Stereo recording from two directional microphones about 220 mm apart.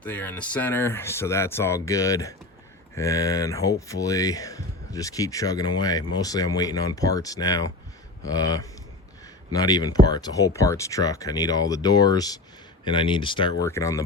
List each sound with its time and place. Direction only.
0.0 s speech: 5° left (ahead or behind)